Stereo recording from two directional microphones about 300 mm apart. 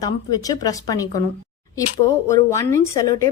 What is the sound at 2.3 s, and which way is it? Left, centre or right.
A woman's voice, centre.